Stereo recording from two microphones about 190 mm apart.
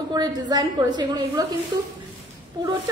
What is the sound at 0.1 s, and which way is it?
A woman's voice, 20° right (ahead or behind).